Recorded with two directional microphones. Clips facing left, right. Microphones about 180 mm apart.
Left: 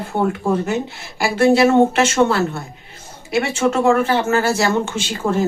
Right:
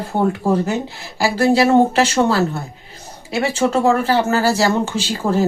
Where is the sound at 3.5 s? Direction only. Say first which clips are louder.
Even; 35° right (ahead or behind).